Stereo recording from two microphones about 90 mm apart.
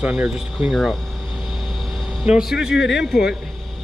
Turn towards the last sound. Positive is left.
turn(degrees=-10)  # may be behind; listen again after turning